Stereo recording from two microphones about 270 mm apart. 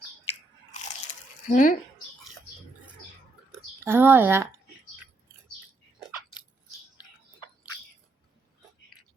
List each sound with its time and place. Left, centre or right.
0.7 s crunch: left
1.5 s speech: left
3.8 s speech: centre